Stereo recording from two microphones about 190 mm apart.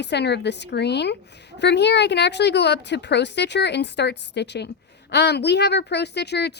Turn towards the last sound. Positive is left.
turn(degrees=60)  # may be behind; listen again after turning